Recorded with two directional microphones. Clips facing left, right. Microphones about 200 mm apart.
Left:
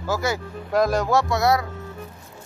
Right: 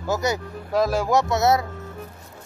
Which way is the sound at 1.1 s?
20° right (ahead or behind).